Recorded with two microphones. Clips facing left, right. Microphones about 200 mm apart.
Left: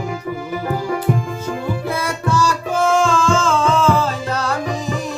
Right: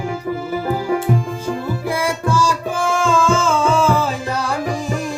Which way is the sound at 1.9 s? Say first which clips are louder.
Right 3 dB; 10° right (ahead or behind).